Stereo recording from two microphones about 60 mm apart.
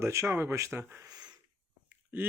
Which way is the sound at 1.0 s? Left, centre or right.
Right.